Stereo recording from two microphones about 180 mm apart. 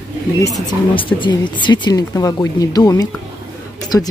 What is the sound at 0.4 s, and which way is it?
Speech, 25° left (ahead or behind).